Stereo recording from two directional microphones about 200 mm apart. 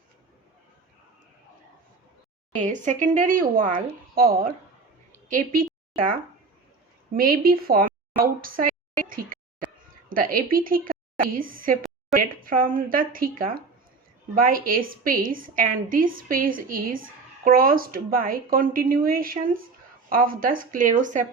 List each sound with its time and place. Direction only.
2.6 s a woman's voice: 40° right (ahead or behind)
7.1 s a woman's voice: 45° right (ahead or behind)